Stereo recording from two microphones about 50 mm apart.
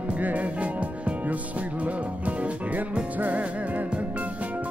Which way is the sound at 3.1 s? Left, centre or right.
Right.